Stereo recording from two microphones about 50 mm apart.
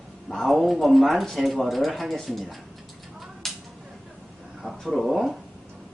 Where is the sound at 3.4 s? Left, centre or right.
Centre.